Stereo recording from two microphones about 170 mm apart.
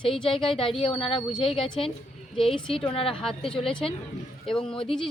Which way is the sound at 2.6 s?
30° left (ahead or behind).